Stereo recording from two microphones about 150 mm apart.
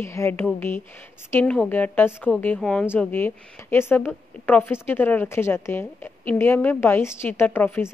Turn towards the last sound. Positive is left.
turn(degrees=15)  # may be behind; listen again after turning